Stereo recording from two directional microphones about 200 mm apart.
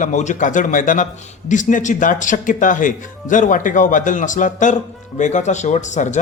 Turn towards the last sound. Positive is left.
turn(degrees=35)  # may be behind; listen again after turning